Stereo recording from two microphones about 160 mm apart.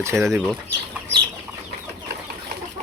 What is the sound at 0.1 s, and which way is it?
Speech, 15° right (ahead or behind).